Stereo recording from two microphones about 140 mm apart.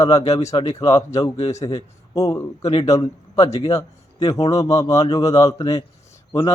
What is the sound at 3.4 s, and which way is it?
Speech, 40° left (ahead or behind).